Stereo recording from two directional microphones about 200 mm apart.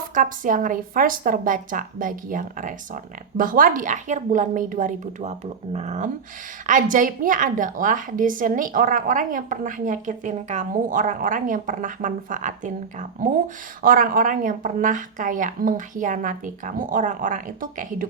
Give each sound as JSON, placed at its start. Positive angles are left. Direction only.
{"t": 0.1, "sound": "a woman's voice", "side_deg": -40}